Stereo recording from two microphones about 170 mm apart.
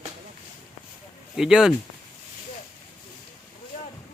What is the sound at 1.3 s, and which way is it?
Speech, 5° right (ahead or behind).